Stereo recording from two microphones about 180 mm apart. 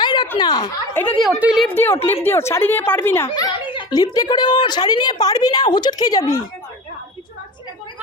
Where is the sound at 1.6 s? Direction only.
10° left (ahead or behind).